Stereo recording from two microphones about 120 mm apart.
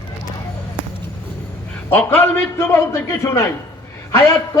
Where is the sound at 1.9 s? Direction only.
15° left (ahead or behind).